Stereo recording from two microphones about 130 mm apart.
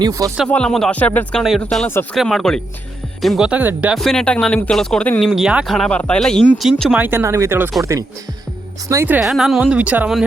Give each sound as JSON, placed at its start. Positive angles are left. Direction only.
{"t": 0.0, "sound": "speech", "side_deg": -25}
{"t": 0.4, "sound": "speech", "side_deg": 10}
{"t": 3.9, "sound": "speech", "side_deg": 5}
{"t": 5.3, "sound": "speech", "side_deg": -5}
{"t": 6.9, "sound": "speech", "side_deg": -15}
{"t": 7.2, "sound": "speech", "side_deg": -25}
{"t": 9.2, "sound": "speech", "side_deg": 0}